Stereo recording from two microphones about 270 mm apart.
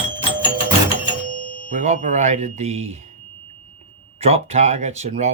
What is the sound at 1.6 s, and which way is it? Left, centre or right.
Speech, right.